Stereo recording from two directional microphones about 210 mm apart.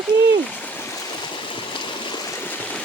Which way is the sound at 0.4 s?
10° left (ahead or behind).